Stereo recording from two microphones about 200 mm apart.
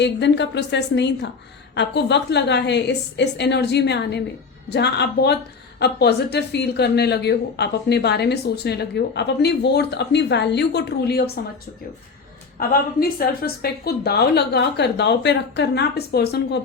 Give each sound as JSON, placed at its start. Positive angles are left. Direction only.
{"t": 0.0, "sound": "speech", "side_deg": 60}
{"t": 12.5, "sound": "speech", "side_deg": 50}